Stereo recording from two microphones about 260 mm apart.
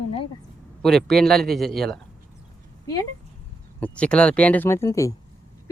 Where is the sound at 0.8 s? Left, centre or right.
Centre.